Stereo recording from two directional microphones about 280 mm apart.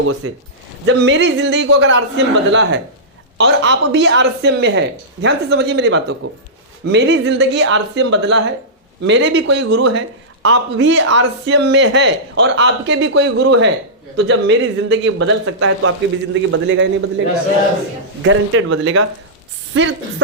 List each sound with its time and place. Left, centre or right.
0.2 s a woman's voice: right